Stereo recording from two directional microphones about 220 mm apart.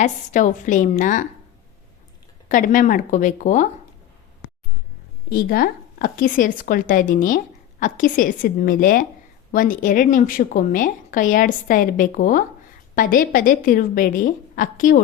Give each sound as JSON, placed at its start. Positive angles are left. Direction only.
{"t": 0.0, "sound": "a woman's voice", "side_deg": 35}
{"t": 2.5, "sound": "a woman's voice", "side_deg": 35}
{"t": 5.3, "sound": "a woman's voice", "side_deg": 45}